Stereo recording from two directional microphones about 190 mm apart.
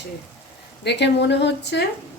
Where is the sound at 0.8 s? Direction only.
65° left (ahead or behind).